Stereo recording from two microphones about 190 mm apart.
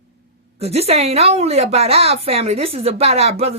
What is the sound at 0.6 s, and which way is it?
A woman's voice, 35° right (ahead or behind).